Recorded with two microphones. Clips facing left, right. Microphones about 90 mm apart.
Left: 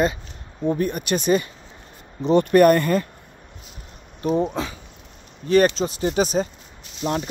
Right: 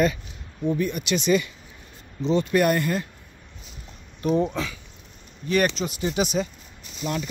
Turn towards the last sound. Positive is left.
turn(degrees=40)  # may be behind; listen again after turning